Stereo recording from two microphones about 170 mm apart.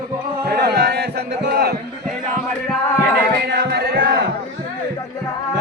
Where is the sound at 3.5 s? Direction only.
70° right (ahead or behind).